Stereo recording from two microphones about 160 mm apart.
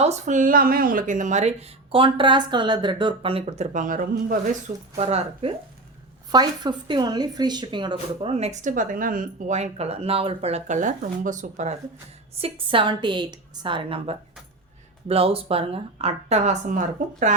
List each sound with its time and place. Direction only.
0.0 s speech: 45° right (ahead or behind)
4.9 s a woman's voice: 40° right (ahead or behind)
6.3 s a woman's voice: 25° right (ahead or behind); by 11.7 s 50° right (ahead or behind)
12.4 s a woman's voice: 35° right (ahead or behind); by 17.3 s 55° right (ahead or behind)